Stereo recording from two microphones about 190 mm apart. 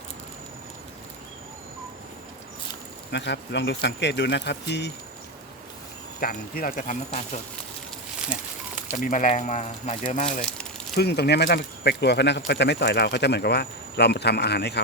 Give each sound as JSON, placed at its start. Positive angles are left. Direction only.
{"t": 3.1, "sound": "speech", "side_deg": 65}
{"t": 6.1, "sound": "speech", "side_deg": 50}
{"t": 8.9, "sound": "speech", "side_deg": 40}
{"t": 10.9, "sound": "speech", "side_deg": 60}